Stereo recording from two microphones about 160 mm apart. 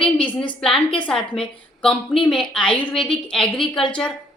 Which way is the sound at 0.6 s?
5° left (ahead or behind).